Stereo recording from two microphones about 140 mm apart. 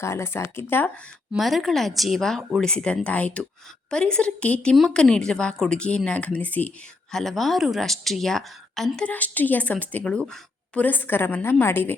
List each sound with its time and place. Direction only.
0.0 s speech: 20° left (ahead or behind)
1.3 s a woman's voice: centre (ahead or behind); by 11.9 s 15° left (ahead or behind)